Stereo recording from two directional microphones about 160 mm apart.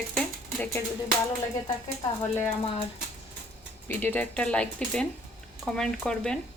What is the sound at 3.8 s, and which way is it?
Speech, 10° left (ahead or behind).